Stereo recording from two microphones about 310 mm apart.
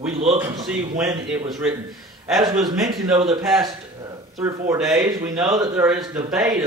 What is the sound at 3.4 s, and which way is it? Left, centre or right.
Speech, centre.